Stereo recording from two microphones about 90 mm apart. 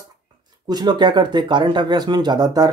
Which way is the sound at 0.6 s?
50° right (ahead or behind).